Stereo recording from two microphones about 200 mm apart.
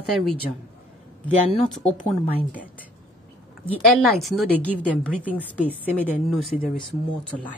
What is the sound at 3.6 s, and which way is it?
A woman's voice, centre (ahead or behind).